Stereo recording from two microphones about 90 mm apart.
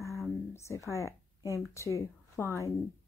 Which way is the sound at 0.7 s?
35° left (ahead or behind).